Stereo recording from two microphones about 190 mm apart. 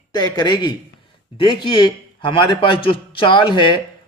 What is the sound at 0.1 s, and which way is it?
Speech, 20° left (ahead or behind).